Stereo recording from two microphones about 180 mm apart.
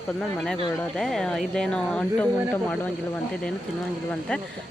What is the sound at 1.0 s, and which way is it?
Speech, centre (ahead or behind).